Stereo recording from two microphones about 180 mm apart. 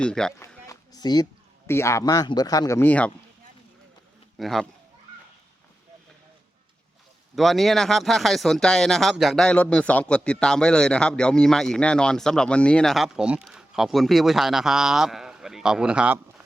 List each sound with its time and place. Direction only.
0.0 s speech: 5° left (ahead or behind)
0.3 s speech: 15° left (ahead or behind)
4.4 s speech: centre (ahead or behind)
7.3 s speech: centre (ahead or behind)